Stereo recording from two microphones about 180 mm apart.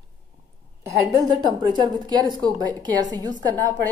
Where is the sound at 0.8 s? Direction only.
15° right (ahead or behind).